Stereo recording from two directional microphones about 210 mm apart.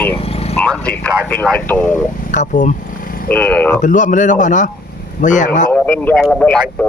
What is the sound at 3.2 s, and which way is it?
Speech, 5° left (ahead or behind).